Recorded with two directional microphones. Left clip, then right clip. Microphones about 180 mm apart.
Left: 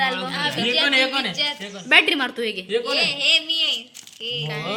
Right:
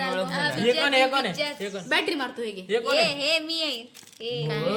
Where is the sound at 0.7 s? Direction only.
25° right (ahead or behind).